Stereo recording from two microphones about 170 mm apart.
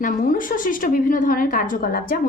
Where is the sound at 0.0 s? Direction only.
55° left (ahead or behind).